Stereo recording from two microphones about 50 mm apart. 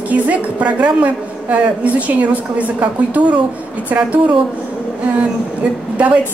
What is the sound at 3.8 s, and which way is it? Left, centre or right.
Speech, right.